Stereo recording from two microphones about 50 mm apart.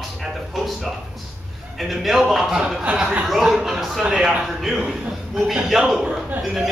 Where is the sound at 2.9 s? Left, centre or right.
Right.